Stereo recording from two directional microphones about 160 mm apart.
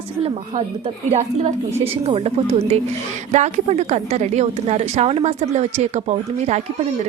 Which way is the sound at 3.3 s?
45° right (ahead or behind).